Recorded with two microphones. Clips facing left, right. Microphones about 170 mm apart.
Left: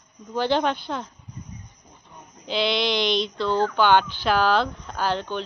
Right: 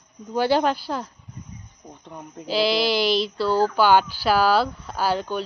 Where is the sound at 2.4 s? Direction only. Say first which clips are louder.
Right 3 dB; 5° right (ahead or behind).